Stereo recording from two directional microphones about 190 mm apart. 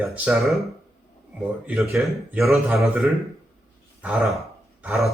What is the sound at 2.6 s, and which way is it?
Speech, 15° right (ahead or behind).